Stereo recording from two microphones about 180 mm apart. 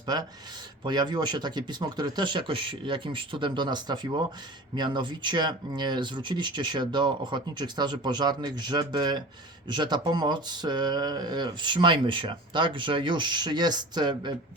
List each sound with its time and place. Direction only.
0.0 s speech: 20° right (ahead or behind)